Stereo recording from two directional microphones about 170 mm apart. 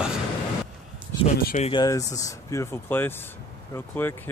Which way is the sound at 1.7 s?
20° left (ahead or behind).